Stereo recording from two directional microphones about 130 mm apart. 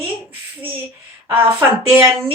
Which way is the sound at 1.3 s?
20° right (ahead or behind).